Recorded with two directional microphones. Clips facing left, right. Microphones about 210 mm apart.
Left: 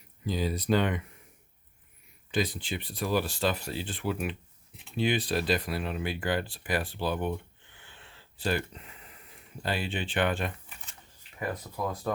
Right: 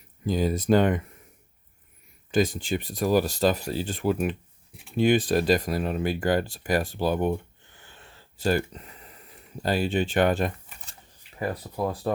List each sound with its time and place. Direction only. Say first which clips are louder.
0.3 s speech: right 6 dB; 45° right (ahead or behind)
2.3 s speech: right 7 dB; 45° right (ahead or behind)